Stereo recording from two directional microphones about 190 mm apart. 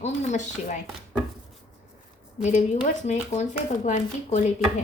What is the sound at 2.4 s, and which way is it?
Speech, 40° left (ahead or behind).